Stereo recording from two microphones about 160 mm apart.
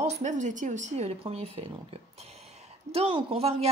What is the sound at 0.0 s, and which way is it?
A woman's voice, 45° right (ahead or behind).